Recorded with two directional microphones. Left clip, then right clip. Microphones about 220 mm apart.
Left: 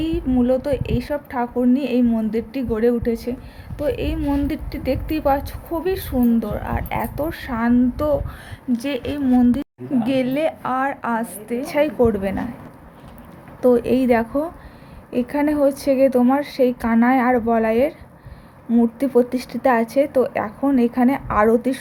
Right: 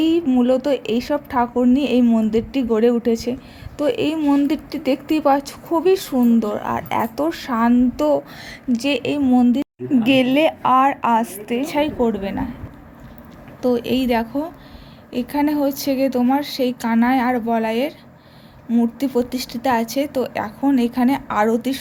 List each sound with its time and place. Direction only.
0.0 s a woman's voice: 20° right (ahead or behind)
11.7 s a woman's voice: centre (ahead or behind)
13.6 s speech: 10° left (ahead or behind)